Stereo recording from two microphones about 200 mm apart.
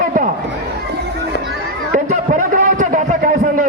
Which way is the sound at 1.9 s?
40° right (ahead or behind).